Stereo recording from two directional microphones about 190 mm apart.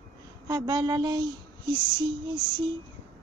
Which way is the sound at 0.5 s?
20° right (ahead or behind).